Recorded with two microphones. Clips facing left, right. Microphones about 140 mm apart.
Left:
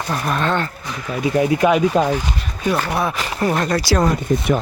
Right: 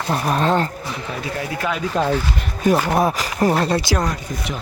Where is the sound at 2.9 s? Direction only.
40° right (ahead or behind).